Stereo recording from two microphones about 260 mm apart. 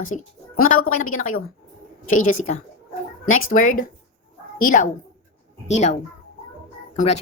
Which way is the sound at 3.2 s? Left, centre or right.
Left.